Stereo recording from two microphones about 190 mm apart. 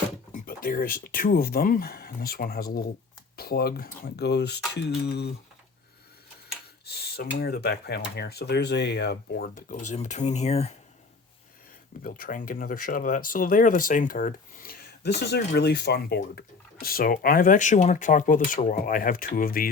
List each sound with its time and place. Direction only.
0.3 s speech: 50° left (ahead or behind)
6.8 s speech: 55° left (ahead or behind); by 10.8 s 35° left (ahead or behind)
12.0 s speech: 50° left (ahead or behind)